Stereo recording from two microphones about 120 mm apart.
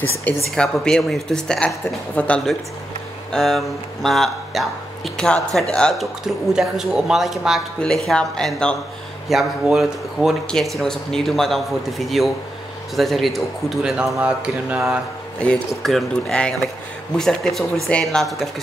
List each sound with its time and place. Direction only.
0.3 s speech: 15° left (ahead or behind); by 14.8 s 10° right (ahead or behind)
15.8 s speech: 5° left (ahead or behind)